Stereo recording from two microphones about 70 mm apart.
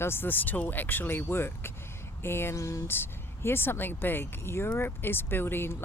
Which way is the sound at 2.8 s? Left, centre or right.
Left.